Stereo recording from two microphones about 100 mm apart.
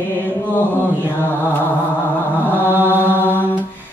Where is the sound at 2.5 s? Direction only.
20° right (ahead or behind).